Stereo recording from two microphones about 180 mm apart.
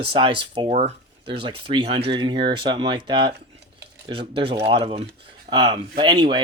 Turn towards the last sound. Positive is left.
turn(degrees=-25)  # may be behind; listen again after turning